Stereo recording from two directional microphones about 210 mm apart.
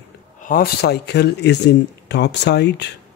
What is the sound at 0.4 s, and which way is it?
Speech, 45° left (ahead or behind).